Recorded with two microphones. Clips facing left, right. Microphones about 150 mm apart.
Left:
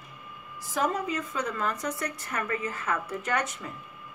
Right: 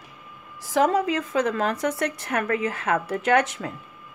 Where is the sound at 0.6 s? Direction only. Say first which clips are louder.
Right 8 dB; 90° right.